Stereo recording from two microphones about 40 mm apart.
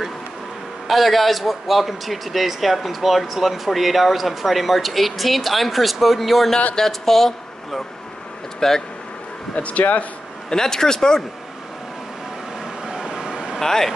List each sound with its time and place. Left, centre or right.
0.8 s a man's voice: centre
9.6 s speech: left
10.5 s speech: centre
12.8 s vehicle: centre
13.6 s speech: centre